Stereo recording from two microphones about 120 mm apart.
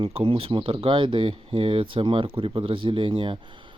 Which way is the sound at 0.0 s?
45° right (ahead or behind).